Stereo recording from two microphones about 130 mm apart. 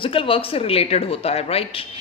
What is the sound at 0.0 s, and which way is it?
A woman's voice, 45° left (ahead or behind).